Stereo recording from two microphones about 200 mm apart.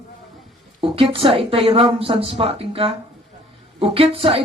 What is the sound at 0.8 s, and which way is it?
Speech, 25° right (ahead or behind).